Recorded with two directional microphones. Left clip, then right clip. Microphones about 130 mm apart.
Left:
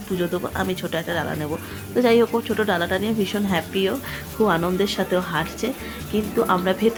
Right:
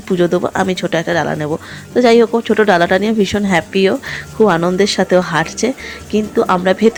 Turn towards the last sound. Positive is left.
turn(degrees=-40)  # may be behind; listen again after turning